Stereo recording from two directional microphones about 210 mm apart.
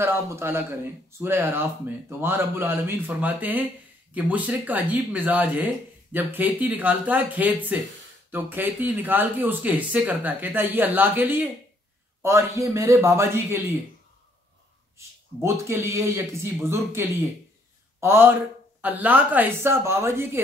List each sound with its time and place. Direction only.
0.0 s speech: 10° right (ahead or behind)
15.0 s speech: 15° right (ahead or behind)